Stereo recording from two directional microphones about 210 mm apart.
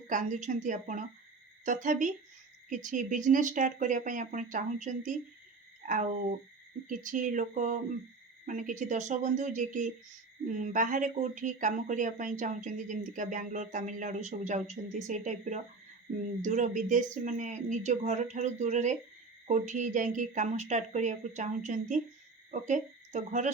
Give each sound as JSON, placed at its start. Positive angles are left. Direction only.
{"t": 0.1, "sound": "speech", "side_deg": -35}